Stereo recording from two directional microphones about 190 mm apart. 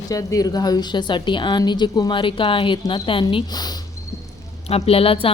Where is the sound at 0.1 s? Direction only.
15° left (ahead or behind).